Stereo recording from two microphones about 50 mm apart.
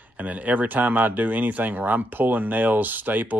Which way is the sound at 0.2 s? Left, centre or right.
Right.